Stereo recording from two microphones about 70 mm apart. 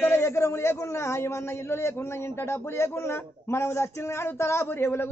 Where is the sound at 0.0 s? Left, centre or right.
Left.